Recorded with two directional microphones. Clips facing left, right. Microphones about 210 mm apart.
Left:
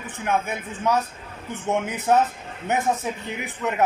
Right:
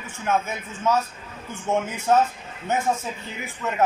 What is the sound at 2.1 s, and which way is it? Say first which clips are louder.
A man's voice: even; 15° left (ahead or behind).